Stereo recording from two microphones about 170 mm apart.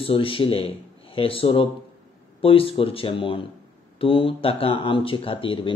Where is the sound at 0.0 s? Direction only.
35° left (ahead or behind).